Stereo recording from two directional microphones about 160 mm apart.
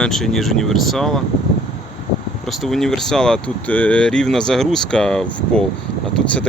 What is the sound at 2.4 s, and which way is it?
Speech, centre (ahead or behind).